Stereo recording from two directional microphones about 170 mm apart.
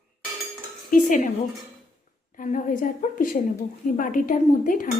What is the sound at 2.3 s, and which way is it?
A woman's voice, 50° left (ahead or behind).